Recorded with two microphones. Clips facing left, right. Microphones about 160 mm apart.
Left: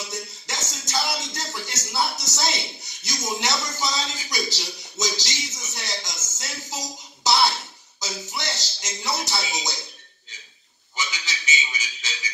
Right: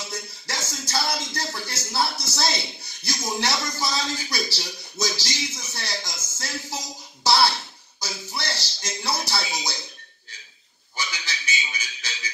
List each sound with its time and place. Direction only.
0.1 s music: 20° left (ahead or behind)
2.0 s speech: 20° left (ahead or behind)
8.4 s music: 20° left (ahead or behind)
11.0 s a sound: 20° left (ahead or behind)